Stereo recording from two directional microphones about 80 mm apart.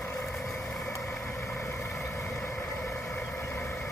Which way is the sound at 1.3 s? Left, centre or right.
Left.